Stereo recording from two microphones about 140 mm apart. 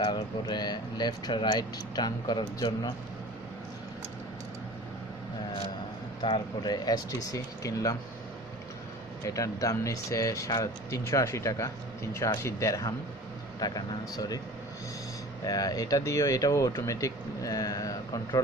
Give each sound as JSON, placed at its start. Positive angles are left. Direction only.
{"t": 0.0, "sound": "speech", "side_deg": 30}
{"t": 6.2, "sound": "speech", "side_deg": 35}
{"t": 9.2, "sound": "speech", "side_deg": 25}
{"t": 15.4, "sound": "speech", "side_deg": 25}